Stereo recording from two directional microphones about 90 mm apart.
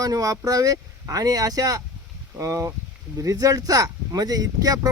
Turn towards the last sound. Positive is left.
turn(degrees=-45)  # may be behind; listen again after turning